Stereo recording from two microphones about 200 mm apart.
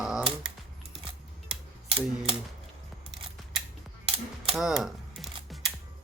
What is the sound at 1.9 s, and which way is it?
Camera, 25° right (ahead or behind).